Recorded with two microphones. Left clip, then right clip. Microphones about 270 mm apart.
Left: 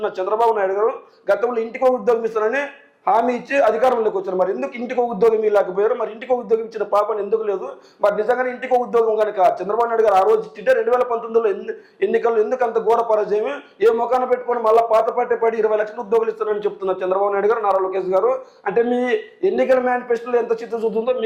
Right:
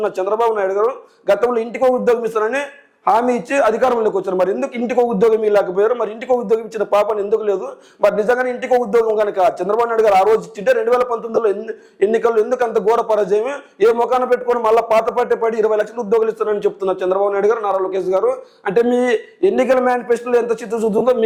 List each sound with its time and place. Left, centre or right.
0.0 s a man's voice: right